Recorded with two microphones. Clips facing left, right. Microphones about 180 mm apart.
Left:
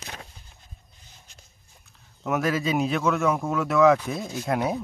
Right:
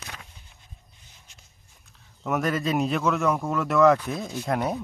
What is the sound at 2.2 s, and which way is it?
Speech, centre (ahead or behind).